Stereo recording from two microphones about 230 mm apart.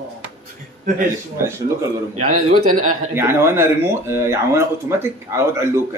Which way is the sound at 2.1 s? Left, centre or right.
Right.